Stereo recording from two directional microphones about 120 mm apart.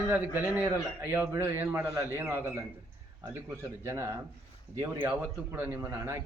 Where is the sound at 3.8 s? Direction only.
25° right (ahead or behind).